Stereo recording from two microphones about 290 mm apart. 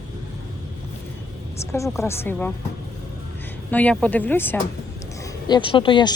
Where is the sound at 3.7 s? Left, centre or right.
Centre.